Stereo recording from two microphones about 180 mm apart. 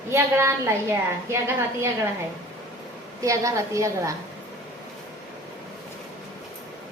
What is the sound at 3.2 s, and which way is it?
Speech, 15° right (ahead or behind).